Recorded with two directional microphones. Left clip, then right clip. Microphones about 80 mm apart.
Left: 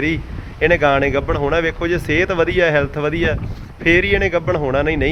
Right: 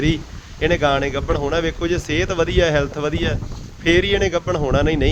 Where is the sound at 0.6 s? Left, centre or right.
Right.